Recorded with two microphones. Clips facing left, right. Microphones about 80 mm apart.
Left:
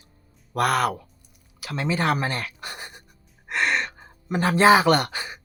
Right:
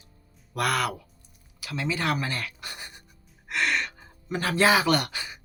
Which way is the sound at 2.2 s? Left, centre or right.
Left.